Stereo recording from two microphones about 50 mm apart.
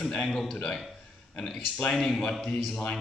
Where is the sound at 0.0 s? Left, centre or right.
Centre.